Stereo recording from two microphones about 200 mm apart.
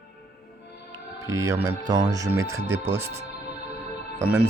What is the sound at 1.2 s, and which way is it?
Speech, 15° right (ahead or behind).